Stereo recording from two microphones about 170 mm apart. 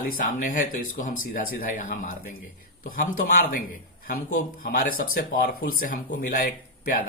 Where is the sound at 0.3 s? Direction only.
50° left (ahead or behind).